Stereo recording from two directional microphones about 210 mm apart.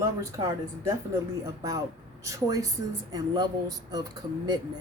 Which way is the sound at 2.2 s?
15° right (ahead or behind).